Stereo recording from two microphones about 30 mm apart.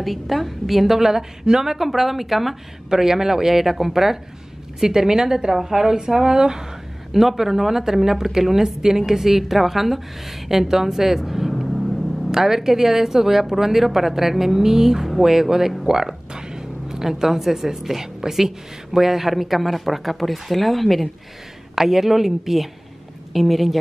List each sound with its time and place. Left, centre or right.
0.0 s speech: centre
2.9 s a woman's voice: centre
7.1 s speech: centre
11.6 s vehicle: centre
12.3 s speech: centre
21.7 s speech: centre